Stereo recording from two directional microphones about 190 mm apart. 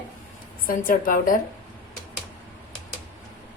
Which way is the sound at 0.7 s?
45° left (ahead or behind).